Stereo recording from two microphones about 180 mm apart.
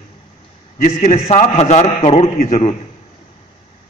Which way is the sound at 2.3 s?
50° left (ahead or behind).